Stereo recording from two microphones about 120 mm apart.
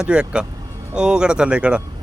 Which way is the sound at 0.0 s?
5° right (ahead or behind).